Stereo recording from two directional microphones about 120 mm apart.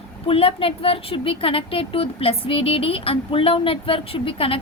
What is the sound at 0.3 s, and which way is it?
A woman's voice, 50° left (ahead or behind).